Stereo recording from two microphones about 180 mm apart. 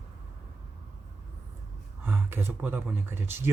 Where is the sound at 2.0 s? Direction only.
10° right (ahead or behind).